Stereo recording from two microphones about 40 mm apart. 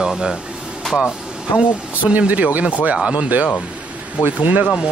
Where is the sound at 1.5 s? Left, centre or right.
Left.